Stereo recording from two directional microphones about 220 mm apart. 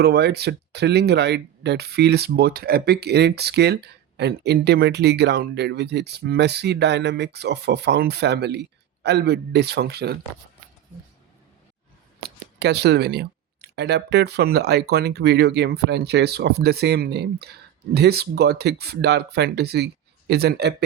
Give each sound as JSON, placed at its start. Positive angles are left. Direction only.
{"t": 0.0, "sound": "speech", "side_deg": -50}
{"t": 12.5, "sound": "speech", "side_deg": -50}